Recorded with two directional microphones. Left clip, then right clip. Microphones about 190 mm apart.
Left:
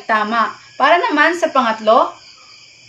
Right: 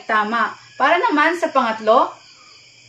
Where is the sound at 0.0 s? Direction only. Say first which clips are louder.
Left 2 dB; 20° left (ahead or behind).